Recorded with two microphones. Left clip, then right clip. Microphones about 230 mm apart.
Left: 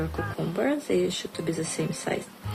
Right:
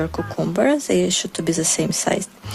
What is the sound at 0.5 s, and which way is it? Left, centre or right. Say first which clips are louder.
A woman's voice: right 8 dB; right.